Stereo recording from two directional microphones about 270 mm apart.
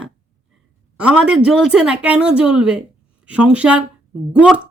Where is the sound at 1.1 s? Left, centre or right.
Centre.